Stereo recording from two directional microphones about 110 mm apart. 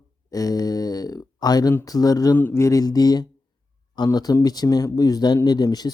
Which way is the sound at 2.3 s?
20° left (ahead or behind).